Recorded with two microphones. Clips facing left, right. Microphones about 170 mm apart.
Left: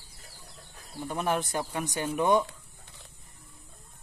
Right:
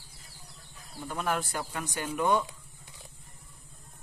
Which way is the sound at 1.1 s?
20° left (ahead or behind).